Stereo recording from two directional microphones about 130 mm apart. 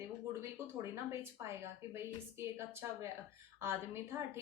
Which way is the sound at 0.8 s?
20° right (ahead or behind).